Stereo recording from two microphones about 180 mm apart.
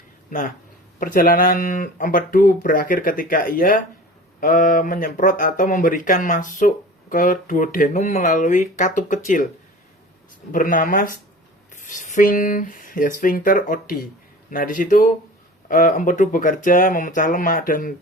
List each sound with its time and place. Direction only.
0.3 s speech: 45° left (ahead or behind)
10.5 s speech: 50° left (ahead or behind)